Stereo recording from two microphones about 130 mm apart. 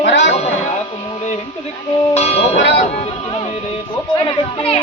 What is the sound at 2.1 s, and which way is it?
Music, 50° left (ahead or behind).